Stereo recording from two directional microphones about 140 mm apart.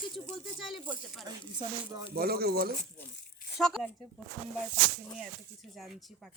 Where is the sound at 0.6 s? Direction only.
Centre (ahead or behind).